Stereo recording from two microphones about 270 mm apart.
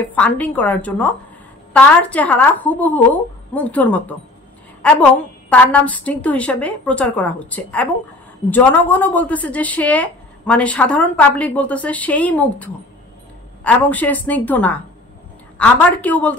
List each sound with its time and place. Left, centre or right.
0.0 s a woman's voice: centre
5.5 s a woman's voice: centre